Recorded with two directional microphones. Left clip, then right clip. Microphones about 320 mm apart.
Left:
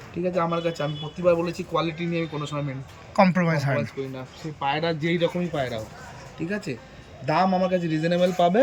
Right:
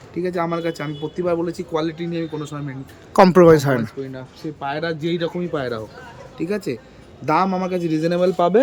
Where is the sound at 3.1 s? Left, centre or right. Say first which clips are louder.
Right 10 dB; centre.